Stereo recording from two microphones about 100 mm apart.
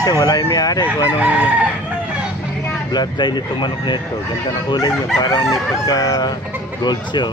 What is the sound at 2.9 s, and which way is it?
Speech, 45° left (ahead or behind).